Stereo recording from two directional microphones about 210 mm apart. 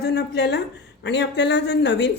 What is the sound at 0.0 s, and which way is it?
Speech, 50° left (ahead or behind).